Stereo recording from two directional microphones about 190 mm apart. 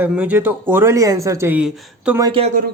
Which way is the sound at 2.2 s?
25° right (ahead or behind).